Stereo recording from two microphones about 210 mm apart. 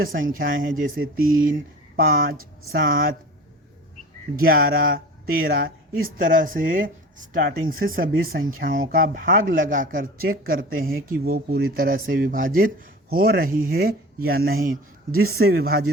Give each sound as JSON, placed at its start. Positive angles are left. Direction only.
{"t": 0.0, "sound": "speech", "side_deg": -45}
{"t": 4.4, "sound": "speech", "side_deg": -45}
{"t": 15.1, "sound": "a man's voice", "side_deg": -90}
{"t": 15.4, "sound": "speech", "side_deg": -45}